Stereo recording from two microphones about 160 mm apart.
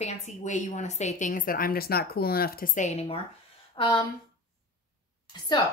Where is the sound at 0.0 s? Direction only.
45° left (ahead or behind).